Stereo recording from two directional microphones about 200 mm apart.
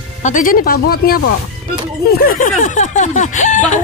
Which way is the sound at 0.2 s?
40° left (ahead or behind).